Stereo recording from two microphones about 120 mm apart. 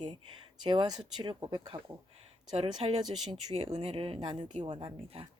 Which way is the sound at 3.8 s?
50° right (ahead or behind).